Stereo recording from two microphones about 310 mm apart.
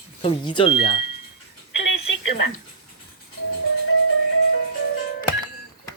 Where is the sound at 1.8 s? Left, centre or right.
Left.